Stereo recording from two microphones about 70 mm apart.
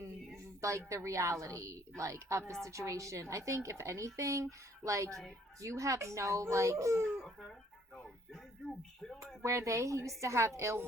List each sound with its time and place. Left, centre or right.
0.6 s a woman's voice: right
7.2 s a sound: centre
9.4 s a woman's voice: right